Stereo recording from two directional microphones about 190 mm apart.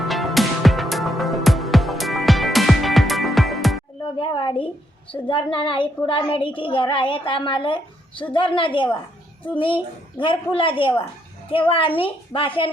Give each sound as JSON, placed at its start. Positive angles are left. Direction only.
{"t": 0.0, "sound": "music", "side_deg": 0}
{"t": 4.0, "sound": "a woman's voice", "side_deg": 25}